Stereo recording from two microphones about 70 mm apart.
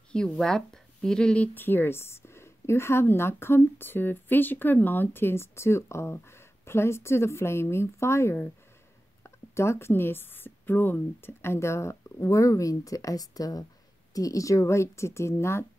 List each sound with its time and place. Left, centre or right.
0.3 s speech: centre
1.5 s a woman's voice: left